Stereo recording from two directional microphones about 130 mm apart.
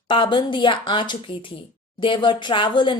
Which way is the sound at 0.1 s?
40° left (ahead or behind).